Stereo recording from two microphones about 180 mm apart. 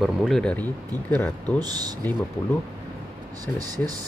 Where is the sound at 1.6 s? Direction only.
20° right (ahead or behind).